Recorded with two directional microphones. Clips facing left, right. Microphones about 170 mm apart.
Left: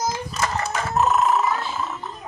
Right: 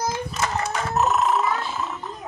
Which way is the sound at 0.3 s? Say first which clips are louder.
Even; centre (ahead or behind).